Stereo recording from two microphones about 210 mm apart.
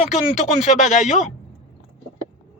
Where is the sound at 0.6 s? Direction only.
35° left (ahead or behind).